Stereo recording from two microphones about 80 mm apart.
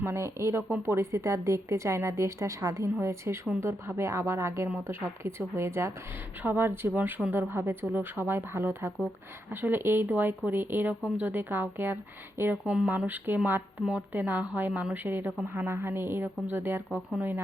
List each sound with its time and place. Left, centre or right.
0.0 s a woman's voice: right
12.6 s a woman's voice: centre